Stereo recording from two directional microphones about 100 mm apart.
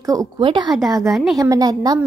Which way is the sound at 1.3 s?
40° right (ahead or behind).